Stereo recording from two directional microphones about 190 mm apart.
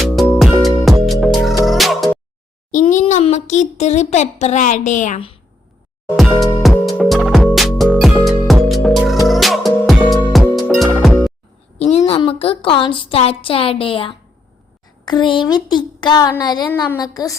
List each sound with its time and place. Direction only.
0.0 s music: centre (ahead or behind)
2.7 s a child's voice: 35° left (ahead or behind)
6.6 s music: centre (ahead or behind)
11.8 s a woman's voice: 35° left (ahead or behind)